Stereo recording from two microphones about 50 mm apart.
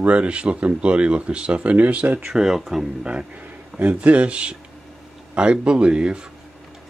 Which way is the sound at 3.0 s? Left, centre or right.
Centre.